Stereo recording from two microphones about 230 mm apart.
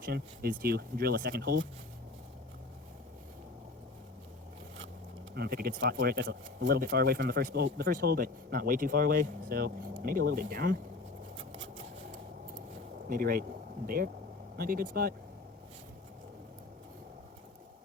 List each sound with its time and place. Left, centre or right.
0.0 s speech: right
5.3 s speech: right
13.1 s speech: right